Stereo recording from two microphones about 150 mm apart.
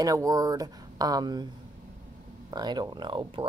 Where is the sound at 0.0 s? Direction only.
25° right (ahead or behind).